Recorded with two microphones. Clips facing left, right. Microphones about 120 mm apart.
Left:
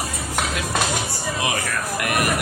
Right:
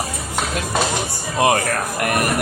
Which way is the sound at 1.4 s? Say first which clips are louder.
Right 10 dB; 55° right (ahead or behind).